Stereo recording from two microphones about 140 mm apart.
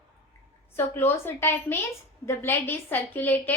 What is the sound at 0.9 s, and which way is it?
A woman's voice, 15° left (ahead or behind).